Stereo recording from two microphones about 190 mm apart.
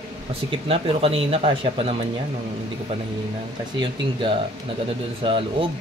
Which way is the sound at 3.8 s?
25° right (ahead or behind).